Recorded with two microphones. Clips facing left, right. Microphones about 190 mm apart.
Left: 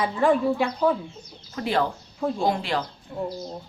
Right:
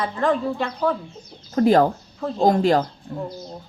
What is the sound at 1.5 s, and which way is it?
Speech, 45° right (ahead or behind).